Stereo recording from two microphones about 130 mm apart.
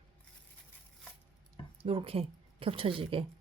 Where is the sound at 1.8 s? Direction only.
45° right (ahead or behind).